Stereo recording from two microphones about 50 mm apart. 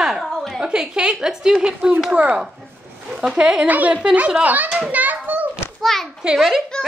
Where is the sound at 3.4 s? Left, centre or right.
Right.